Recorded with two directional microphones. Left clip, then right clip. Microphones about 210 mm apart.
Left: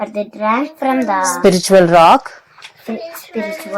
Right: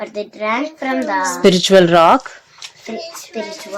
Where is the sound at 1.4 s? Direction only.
10° right (ahead or behind).